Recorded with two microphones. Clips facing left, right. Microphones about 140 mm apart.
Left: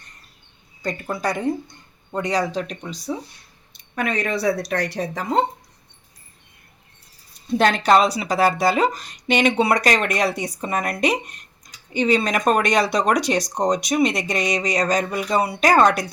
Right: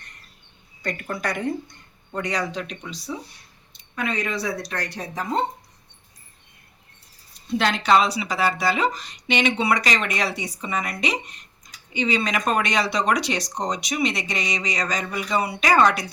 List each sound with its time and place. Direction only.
0.8 s speech: 35° left (ahead or behind)
3.9 s speech: 55° left (ahead or behind); by 5.2 s 70° left (ahead or behind)
7.6 s speech: 45° left (ahead or behind)